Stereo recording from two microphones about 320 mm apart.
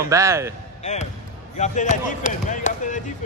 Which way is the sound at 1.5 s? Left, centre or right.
Left.